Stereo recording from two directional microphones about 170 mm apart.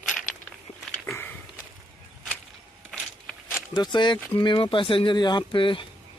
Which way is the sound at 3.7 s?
25° left (ahead or behind).